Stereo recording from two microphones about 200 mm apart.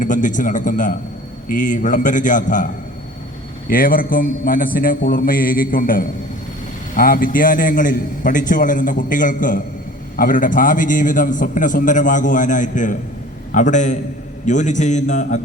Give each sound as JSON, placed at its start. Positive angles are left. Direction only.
{"t": 0.0, "sound": "a man's voice", "side_deg": 40}
{"t": 3.7, "sound": "a man's voice", "side_deg": 45}